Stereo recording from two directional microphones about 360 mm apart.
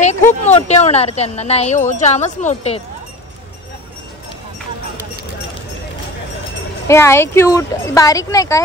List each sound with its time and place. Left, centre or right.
0.0 s a woman's voice: centre
6.9 s a woman's voice: centre